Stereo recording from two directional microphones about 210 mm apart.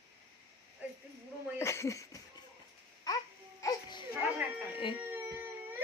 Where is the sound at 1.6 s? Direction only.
15° left (ahead or behind).